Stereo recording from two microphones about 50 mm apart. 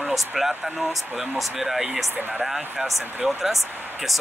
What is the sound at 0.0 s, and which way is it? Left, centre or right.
Speech, centre.